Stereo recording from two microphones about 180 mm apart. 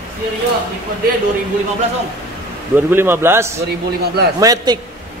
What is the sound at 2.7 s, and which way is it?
Speech, 10° right (ahead or behind).